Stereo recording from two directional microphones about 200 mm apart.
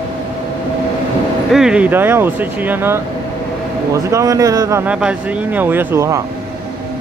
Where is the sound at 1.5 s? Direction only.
5° right (ahead or behind).